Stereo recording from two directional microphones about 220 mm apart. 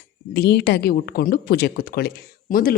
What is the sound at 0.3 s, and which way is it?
A woman's voice, 50° left (ahead or behind).